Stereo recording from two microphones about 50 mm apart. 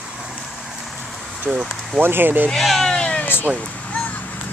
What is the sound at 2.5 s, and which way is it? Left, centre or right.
Speech, centre.